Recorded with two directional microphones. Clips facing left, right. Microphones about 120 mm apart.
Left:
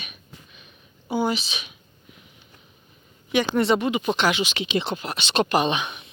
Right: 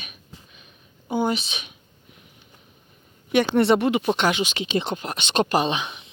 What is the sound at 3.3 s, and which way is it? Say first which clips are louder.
Speech: right 2 dB; 55° right (ahead or behind).